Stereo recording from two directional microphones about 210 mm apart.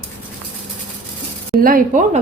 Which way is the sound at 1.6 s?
40° right (ahead or behind).